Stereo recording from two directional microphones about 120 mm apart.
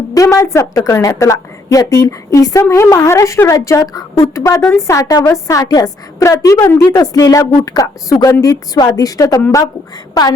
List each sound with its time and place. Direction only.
0.1 s a woman's voice: 25° left (ahead or behind)